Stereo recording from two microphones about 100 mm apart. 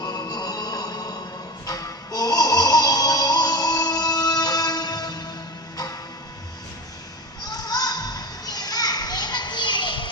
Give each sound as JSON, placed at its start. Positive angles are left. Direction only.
{"t": 0.0, "sound": "music", "side_deg": 40}
{"t": 7.4, "sound": "children playing", "side_deg": 40}